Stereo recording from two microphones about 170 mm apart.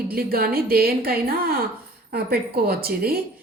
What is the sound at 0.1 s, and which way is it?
A woman's voice, 60° right (ahead or behind).